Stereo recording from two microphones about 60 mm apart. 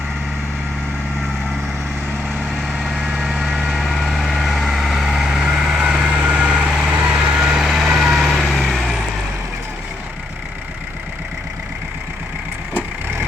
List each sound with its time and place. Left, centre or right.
2.9 s vehicle: centre
3.7 s vehicle: centre